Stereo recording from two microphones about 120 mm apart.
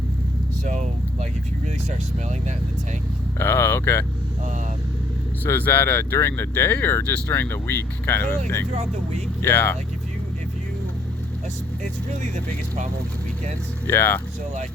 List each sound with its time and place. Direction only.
0.6 s vehicle: 90° right
3.3 s speech: 20° left (ahead or behind)
5.5 s speech: 15° left (ahead or behind)
8.7 s speech: 65° right (ahead or behind)
9.4 s speech: 20° left (ahead or behind)
12.3 s speech: 90° right
13.8 s speech: 20° left (ahead or behind)